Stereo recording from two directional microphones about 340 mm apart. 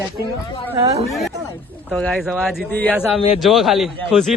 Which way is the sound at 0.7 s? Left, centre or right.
Centre.